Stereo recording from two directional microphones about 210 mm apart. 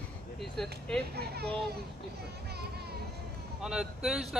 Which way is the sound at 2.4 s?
50° right (ahead or behind).